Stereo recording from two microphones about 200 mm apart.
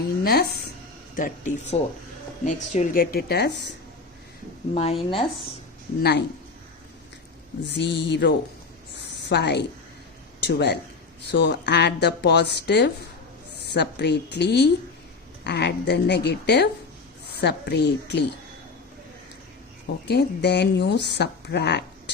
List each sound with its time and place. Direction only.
0.3 s a woman's voice: 50° left (ahead or behind)
4.7 s speech: 30° left (ahead or behind)
6.0 s speech: 55° left (ahead or behind)
7.6 s speech: 60° left (ahead or behind)
9.0 s a sound: 60° left (ahead or behind)
10.4 s speech: 55° left (ahead or behind)
20.1 s speech: 55° left (ahead or behind)